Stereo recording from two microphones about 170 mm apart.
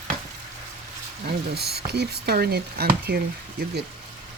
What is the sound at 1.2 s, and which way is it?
Speech, 70° right (ahead or behind).